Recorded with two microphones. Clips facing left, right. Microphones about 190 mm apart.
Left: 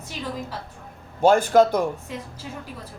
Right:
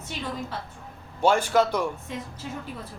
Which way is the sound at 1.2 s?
45° left (ahead or behind).